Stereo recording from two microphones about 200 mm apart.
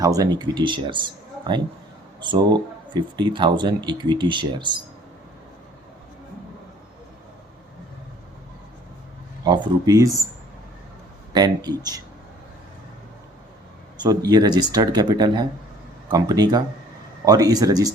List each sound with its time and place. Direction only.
0.0 s speech: 15° right (ahead or behind)
9.4 s speech: 20° right (ahead or behind)
11.3 s speech: 20° right (ahead or behind)
14.0 s speech: 20° right (ahead or behind)